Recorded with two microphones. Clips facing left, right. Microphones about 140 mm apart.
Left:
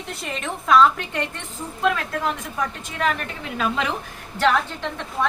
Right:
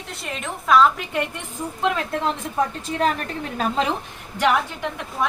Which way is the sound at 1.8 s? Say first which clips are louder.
Even; 25° right (ahead or behind).